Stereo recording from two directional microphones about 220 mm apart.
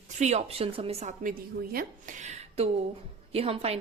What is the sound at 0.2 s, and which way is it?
A woman's voice, 30° right (ahead or behind).